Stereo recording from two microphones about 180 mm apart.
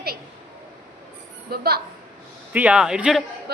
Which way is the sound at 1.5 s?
60° right (ahead or behind).